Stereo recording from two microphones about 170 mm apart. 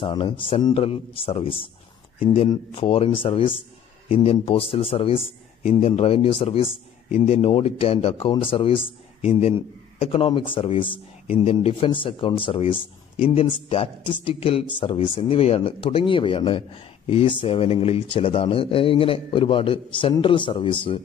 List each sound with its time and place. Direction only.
0.0 s a man's voice: 30° left (ahead or behind)